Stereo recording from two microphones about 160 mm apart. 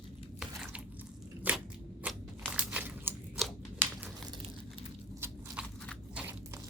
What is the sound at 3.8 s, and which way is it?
Crumpling, 10° right (ahead or behind).